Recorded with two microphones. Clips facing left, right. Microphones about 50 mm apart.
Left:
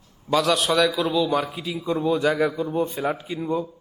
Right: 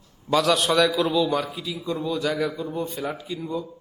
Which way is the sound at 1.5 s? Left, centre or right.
Left.